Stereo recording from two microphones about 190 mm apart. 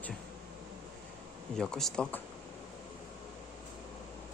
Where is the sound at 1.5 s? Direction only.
5° left (ahead or behind).